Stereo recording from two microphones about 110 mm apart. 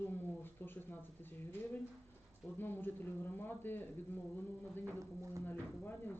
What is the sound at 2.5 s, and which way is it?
A woman's voice, 20° left (ahead or behind).